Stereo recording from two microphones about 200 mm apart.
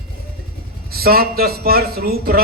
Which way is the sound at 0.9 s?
50° right (ahead or behind).